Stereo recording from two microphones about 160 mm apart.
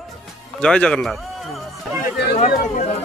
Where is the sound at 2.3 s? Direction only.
50° left (ahead or behind).